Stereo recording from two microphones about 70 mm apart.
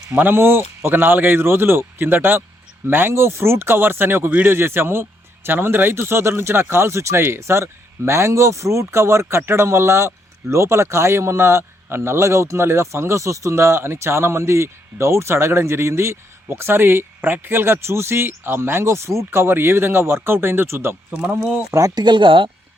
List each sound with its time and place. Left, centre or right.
0.2 s a man's voice: right
4.3 s speech: centre
4.5 s a man's voice: right
21.1 s speech: right
21.7 s speech: right
21.9 s speech: right